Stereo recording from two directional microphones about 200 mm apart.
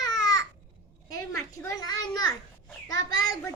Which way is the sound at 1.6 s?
20° left (ahead or behind).